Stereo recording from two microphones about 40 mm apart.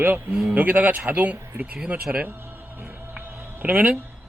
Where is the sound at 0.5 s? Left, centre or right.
Right.